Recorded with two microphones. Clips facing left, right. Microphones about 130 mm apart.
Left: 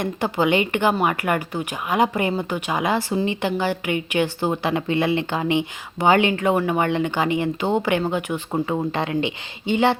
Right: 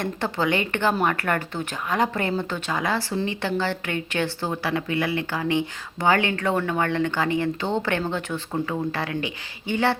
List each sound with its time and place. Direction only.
0.0 s a woman's voice: 15° left (ahead or behind)
8.5 s speech: 25° left (ahead or behind)